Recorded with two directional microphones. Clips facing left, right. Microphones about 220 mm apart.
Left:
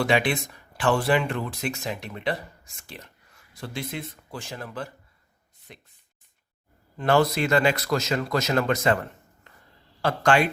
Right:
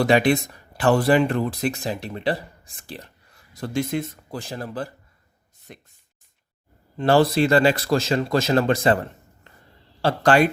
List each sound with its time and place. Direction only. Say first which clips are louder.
0.0 s speech: right 5 dB; 40° right (ahead or behind)
5.7 s speech: right 4 dB; 45° right (ahead or behind)
6.9 s speech: right 4 dB; 30° right (ahead or behind)